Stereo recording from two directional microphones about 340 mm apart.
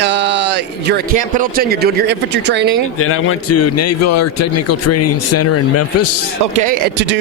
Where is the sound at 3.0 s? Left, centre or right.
Left.